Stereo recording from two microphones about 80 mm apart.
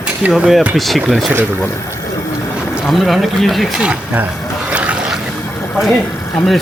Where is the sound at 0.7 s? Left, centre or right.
Centre.